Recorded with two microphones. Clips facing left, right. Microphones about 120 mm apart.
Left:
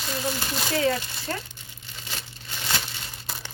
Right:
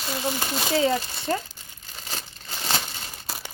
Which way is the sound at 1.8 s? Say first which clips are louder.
Right 2 dB; 40° right (ahead or behind).